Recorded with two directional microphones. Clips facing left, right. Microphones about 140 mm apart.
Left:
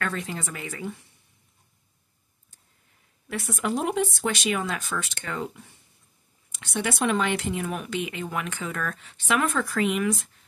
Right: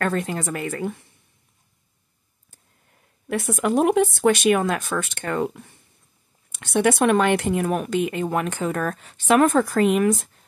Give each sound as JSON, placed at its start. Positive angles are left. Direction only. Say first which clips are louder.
{"t": 0.0, "sound": "speech", "louder": "right 7 dB", "side_deg": -45}
{"t": 3.3, "sound": "speech", "louder": "right 6 dB", "side_deg": -55}